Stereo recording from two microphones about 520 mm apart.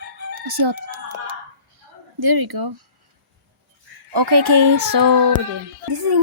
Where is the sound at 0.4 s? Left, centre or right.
Right.